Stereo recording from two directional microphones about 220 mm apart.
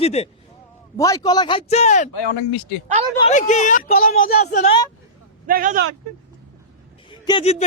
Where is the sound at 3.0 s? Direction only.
30° right (ahead or behind).